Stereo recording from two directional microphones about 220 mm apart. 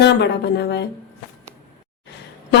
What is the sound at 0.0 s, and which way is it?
Speech, 50° left (ahead or behind).